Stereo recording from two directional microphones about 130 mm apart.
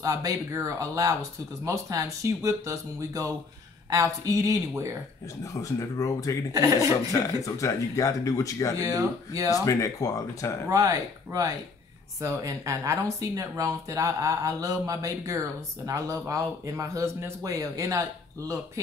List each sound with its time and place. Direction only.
0.0 s speech: 25° right (ahead or behind)
5.4 s speech: 25° left (ahead or behind)
6.5 s speech: 25° right (ahead or behind)
7.1 s speech: 25° left (ahead or behind)
8.8 s speech: 25° right (ahead or behind)
9.5 s speech: 25° left (ahead or behind)
10.7 s speech: 25° right (ahead or behind)